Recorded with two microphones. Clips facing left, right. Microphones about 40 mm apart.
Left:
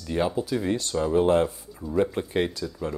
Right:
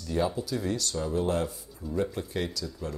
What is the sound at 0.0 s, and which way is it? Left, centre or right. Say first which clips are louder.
Speech: left 3 dB; left.